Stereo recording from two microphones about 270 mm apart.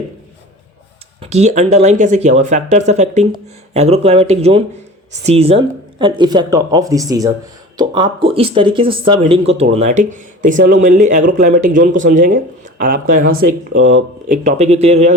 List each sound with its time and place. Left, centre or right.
1.2 s speech: right